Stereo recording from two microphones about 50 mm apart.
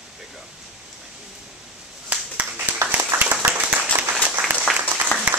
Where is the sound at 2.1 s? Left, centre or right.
Right.